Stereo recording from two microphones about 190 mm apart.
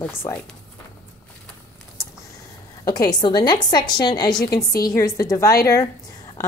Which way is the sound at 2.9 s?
20° left (ahead or behind).